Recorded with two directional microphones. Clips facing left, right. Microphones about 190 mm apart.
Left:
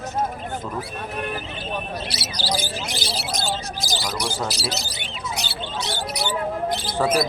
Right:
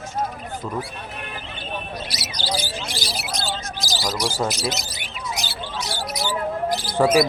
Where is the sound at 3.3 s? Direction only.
50° left (ahead or behind).